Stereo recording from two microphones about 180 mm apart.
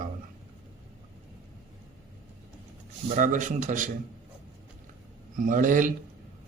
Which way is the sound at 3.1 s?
45° right (ahead or behind).